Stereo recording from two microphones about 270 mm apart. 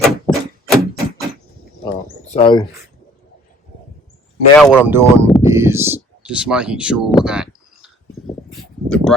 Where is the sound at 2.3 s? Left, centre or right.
Centre.